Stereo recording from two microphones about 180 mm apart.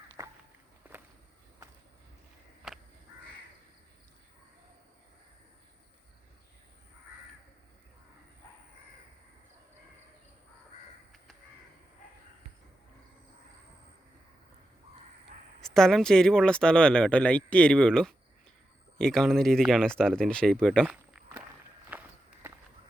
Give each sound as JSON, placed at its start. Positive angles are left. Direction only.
{"t": 0.2, "sound": "walk", "side_deg": -20}
{"t": 2.7, "sound": "crow", "side_deg": 0}
{"t": 15.3, "sound": "a sound", "side_deg": -40}
{"t": 15.6, "sound": "speech", "side_deg": 5}
{"t": 20.8, "sound": "walk", "side_deg": -5}